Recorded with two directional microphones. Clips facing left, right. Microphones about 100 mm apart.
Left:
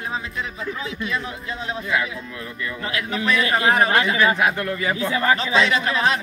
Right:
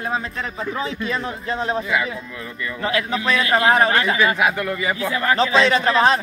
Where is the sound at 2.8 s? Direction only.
30° right (ahead or behind).